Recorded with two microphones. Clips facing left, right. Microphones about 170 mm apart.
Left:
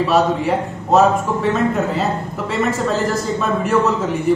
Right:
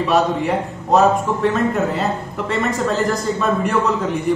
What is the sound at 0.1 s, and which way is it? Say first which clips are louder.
A man's voice: right 1 dB; centre (ahead or behind).